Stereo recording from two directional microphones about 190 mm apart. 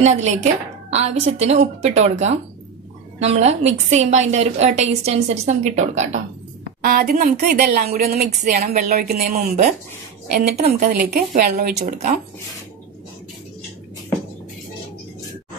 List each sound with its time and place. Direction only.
0.0 s a woman's voice: 35° right (ahead or behind)
6.8 s a woman's voice: 50° right (ahead or behind); by 9.7 s 35° right (ahead or behind)
10.9 s speech: 50° right (ahead or behind)